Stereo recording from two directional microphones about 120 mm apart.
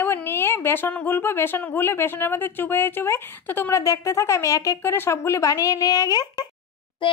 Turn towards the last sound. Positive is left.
turn(degrees=45)  # may be behind; listen again after turning